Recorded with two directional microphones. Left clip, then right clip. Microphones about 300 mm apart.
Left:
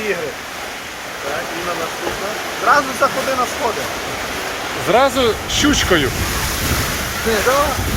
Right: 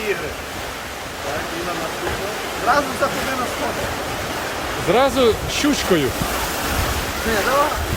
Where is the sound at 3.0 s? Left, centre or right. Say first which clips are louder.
Left 4 dB; centre.